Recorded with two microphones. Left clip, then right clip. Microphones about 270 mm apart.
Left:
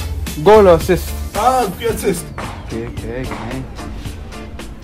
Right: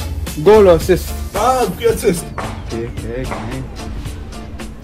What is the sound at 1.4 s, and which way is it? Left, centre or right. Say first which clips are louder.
Speech: right 1 dB; centre.